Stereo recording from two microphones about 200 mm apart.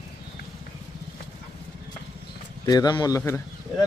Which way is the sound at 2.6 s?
20° left (ahead or behind).